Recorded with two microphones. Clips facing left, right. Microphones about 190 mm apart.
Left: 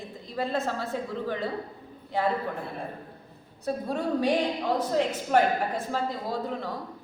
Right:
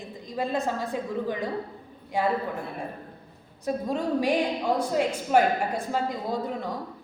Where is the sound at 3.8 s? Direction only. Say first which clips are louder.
Even; 15° right (ahead or behind).